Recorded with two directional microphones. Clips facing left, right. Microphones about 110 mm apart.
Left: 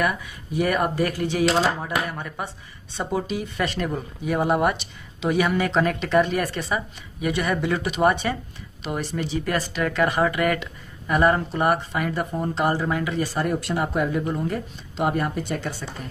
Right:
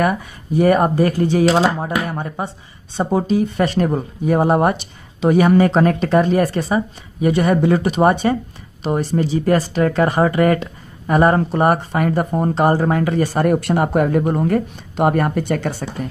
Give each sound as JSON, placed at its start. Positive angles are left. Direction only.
{"t": 0.0, "sound": "speech", "side_deg": -40}